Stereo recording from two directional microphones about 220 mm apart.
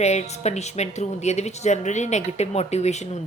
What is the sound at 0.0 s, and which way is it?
A woman's voice, 30° left (ahead or behind).